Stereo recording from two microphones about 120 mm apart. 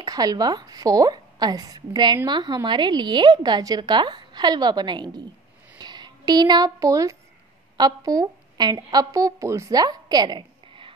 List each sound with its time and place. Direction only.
0.0 s a woman's voice: 30° right (ahead or behind)
5.8 s a sound: 35° right (ahead or behind)
7.7 s a woman's voice: 35° right (ahead or behind)